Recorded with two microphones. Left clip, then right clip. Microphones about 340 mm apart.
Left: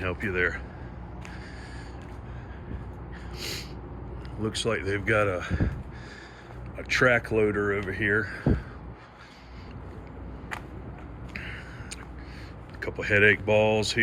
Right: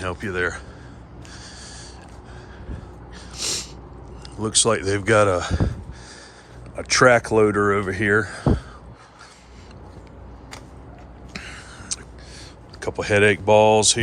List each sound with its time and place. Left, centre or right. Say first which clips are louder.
0.0 s speech: right 3 dB; centre
3.3 s snort: right 8 dB; centre
4.4 s speech: right 8 dB; centre
6.7 s speech: right 7 dB; centre
7.4 s speech: right 7 dB; right
7.8 s speech: right 6 dB; centre
11.4 s a sound: right 6 dB; centre
12.8 s speech: right 4 dB; centre